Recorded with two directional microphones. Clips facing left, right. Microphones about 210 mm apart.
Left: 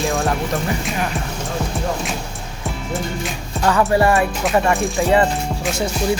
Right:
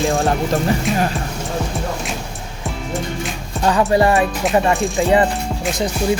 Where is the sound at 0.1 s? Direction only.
30° right (ahead or behind).